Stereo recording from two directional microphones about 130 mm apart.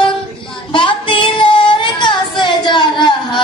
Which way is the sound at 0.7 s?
40° left (ahead or behind).